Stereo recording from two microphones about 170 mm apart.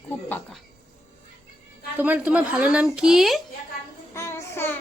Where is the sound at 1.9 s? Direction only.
10° right (ahead or behind).